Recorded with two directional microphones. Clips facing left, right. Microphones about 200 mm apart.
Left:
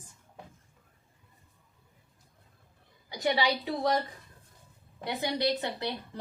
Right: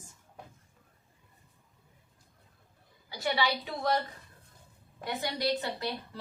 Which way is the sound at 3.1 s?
15° left (ahead or behind).